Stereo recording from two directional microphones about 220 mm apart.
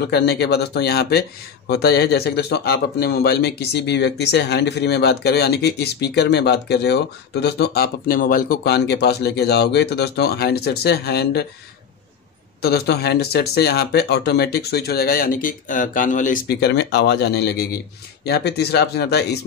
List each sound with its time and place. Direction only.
0.1 s speech: 50° left (ahead or behind)
12.6 s speech: 45° left (ahead or behind)